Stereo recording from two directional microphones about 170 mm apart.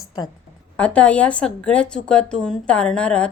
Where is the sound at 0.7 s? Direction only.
5° left (ahead or behind).